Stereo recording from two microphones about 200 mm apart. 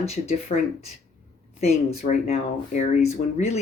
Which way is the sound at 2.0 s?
35° left (ahead or behind).